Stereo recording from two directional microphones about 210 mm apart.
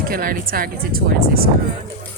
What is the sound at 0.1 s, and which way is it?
Speech, 45° right (ahead or behind).